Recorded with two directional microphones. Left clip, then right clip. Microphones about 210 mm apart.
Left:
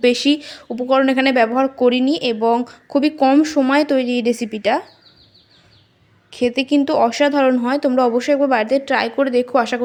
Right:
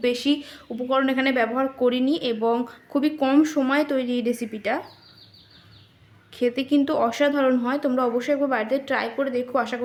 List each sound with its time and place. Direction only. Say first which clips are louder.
0.0 s speech: left 7 dB; 30° left (ahead or behind)
6.3 s speech: left 5 dB; 25° left (ahead or behind)